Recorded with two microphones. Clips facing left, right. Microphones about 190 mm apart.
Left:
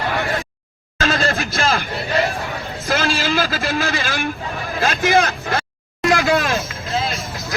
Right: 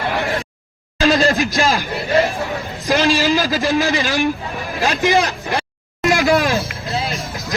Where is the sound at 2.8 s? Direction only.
15° right (ahead or behind).